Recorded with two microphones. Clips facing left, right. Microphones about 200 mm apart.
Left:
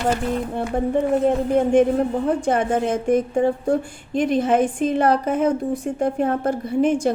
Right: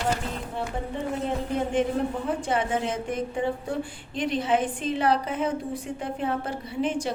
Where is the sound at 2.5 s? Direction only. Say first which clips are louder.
Left 5 dB; 50° left (ahead or behind).